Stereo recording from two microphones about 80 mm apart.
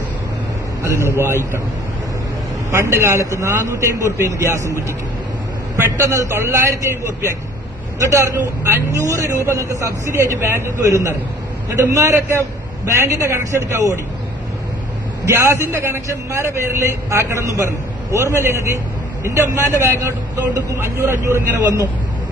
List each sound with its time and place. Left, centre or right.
0.8 s speech: right
2.7 s speech: right
7.9 s a man's voice: right
15.3 s speech: right